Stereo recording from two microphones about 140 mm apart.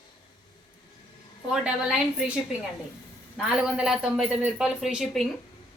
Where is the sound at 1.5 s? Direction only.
5° right (ahead or behind).